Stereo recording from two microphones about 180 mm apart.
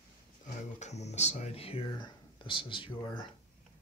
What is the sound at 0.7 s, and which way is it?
Speech, 40° left (ahead or behind).